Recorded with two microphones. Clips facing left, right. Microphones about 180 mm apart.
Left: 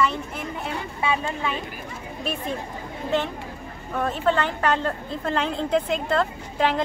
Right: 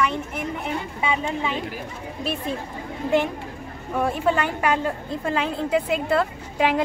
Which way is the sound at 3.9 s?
10° right (ahead or behind).